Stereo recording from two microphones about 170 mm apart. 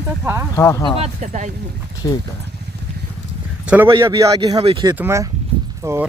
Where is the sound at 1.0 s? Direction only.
40° right (ahead or behind).